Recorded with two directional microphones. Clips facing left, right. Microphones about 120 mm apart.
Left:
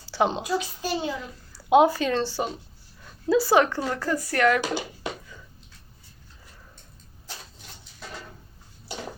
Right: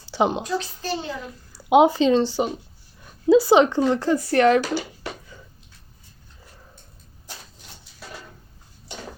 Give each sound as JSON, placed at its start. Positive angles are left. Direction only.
{"t": 0.0, "sound": "a sound", "side_deg": -15}
{"t": 0.4, "sound": "a child's voice", "side_deg": 10}
{"t": 1.5, "sound": "speech", "side_deg": -20}